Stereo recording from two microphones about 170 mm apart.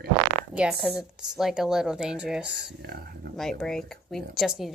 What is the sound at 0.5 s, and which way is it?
A woman's voice, 5° right (ahead or behind).